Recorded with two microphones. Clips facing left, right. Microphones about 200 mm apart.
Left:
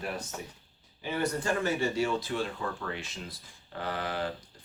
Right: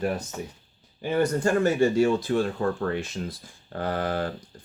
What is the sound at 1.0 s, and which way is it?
Speech, 45° right (ahead or behind).